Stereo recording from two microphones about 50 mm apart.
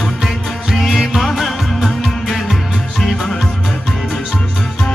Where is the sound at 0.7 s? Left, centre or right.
Centre.